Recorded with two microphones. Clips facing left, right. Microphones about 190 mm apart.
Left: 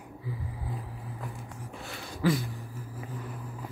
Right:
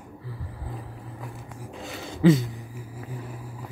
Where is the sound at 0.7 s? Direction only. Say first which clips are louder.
Right 1 dB; centre (ahead or behind).